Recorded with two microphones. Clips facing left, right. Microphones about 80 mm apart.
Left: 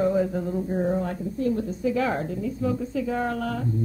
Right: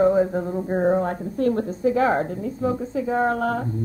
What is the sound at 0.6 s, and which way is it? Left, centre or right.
Speech, right.